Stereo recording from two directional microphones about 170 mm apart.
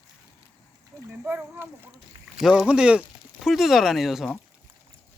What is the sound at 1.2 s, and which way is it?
Speech, 10° right (ahead or behind).